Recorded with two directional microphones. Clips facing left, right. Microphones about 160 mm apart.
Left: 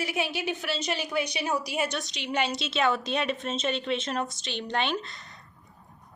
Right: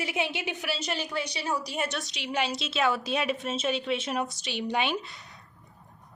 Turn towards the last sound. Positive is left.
turn(degrees=-10)  # may be behind; listen again after turning